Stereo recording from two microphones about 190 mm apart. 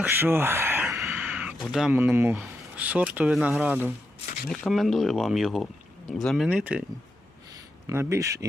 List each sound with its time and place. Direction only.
0.0 s speech: 10° right (ahead or behind)
7.9 s speech: 15° right (ahead or behind)